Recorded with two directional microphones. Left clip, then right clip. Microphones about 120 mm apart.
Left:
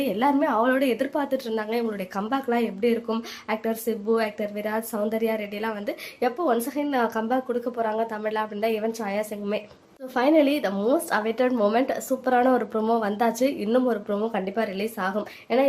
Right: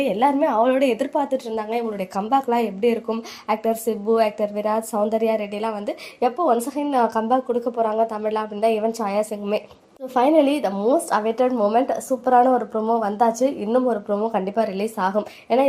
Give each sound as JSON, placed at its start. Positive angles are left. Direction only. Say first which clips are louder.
{"t": 0.0, "sound": "a woman's voice", "louder": "right 4 dB", "side_deg": -10}
{"t": 10.2, "sound": "a woman's voice", "louder": "right 3 dB", "side_deg": -10}
{"t": 11.4, "sound": "a woman's voice", "louder": "right 3 dB", "side_deg": 10}
{"t": 12.5, "sound": "speech", "louder": "right 3 dB", "side_deg": 15}
{"t": 13.1, "sound": "a woman's voice", "louder": "right 4 dB", "side_deg": 5}
{"t": 14.4, "sound": "a woman's voice", "louder": "right 5 dB", "side_deg": -15}